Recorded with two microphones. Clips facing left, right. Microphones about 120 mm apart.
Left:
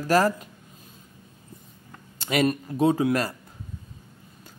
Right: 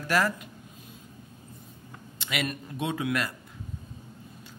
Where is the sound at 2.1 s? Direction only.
40° left (ahead or behind).